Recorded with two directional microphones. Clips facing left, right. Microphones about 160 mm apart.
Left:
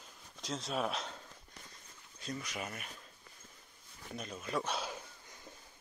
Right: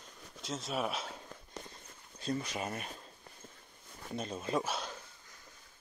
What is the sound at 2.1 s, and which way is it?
Speech, 30° right (ahead or behind).